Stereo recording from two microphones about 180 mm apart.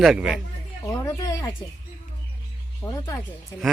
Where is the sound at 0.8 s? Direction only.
15° left (ahead or behind).